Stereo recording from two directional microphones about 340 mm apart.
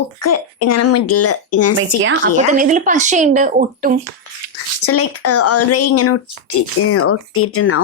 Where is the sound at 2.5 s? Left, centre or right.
Right.